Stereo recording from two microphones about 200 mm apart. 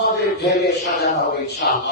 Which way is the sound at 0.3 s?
55° left (ahead or behind).